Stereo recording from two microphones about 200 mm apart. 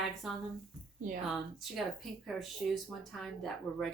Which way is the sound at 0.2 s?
Centre (ahead or behind).